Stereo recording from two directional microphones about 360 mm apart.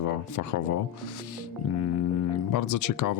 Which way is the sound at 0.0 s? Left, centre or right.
Left.